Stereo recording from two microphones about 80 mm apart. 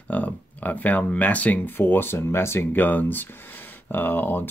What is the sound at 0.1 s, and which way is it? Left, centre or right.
Speech, centre.